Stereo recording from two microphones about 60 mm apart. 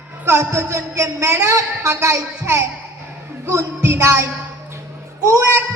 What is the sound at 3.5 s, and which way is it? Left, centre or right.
Music, right.